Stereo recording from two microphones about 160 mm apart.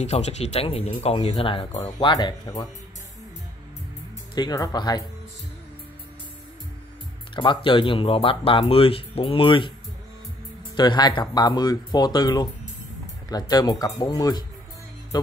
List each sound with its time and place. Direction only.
0.0 s speech: 45° left (ahead or behind)
2.0 s speech: 30° left (ahead or behind)
4.4 s speech: 25° left (ahead or behind)
7.3 s speech: 30° left (ahead or behind)
10.8 s speech: 25° left (ahead or behind)